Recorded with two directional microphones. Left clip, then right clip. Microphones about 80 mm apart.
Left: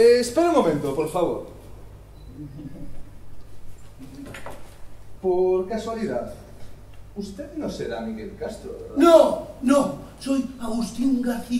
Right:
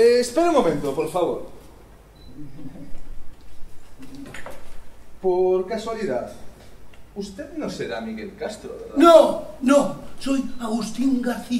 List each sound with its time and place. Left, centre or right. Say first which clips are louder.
0.0 s a man's voice: even; centre
5.2 s speech: right 1 dB; right
7.2 s speech: right 2 dB; right